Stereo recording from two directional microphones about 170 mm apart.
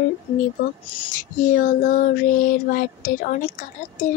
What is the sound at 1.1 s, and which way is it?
Speech, 50° left (ahead or behind).